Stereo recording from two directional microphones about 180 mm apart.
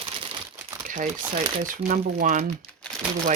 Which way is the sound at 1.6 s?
50° right (ahead or behind).